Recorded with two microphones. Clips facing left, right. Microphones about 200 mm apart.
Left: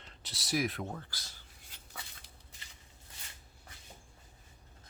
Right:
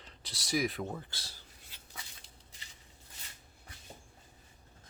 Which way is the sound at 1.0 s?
25° right (ahead or behind).